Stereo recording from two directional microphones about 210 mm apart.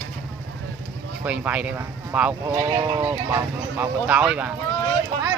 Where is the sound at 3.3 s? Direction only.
10° right (ahead or behind).